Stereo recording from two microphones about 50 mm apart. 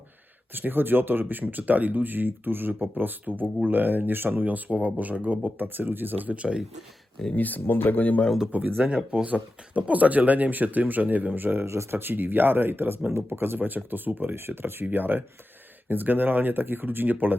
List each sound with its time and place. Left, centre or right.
0.5 s speech: right
6.3 s speech: right
7.3 s speech: left
8.5 s speech: right
8.9 s speech: centre
9.2 s speech: right
11.6 s speech: right
14.3 s speech: right
14.8 s speech: right